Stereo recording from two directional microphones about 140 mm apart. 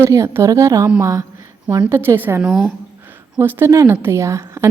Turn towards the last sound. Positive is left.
turn(degrees=-20)  # may be behind; listen again after turning